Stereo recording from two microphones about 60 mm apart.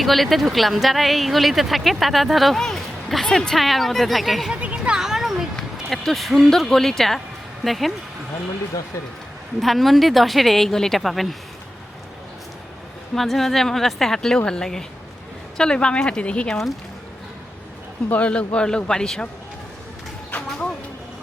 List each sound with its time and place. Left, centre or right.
0.0 s speech: centre
4.5 s a sound: centre
5.9 s speech: centre
9.6 s speech: centre
13.1 s speech: centre
18.1 s speech: left
20.3 s a sound: left